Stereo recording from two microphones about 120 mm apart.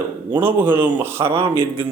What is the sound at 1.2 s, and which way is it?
Speech, 50° right (ahead or behind).